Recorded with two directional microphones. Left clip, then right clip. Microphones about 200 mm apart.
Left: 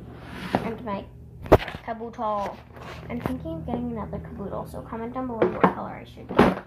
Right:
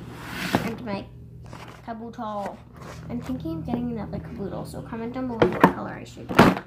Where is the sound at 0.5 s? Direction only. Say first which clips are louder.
Even; 20° right (ahead or behind).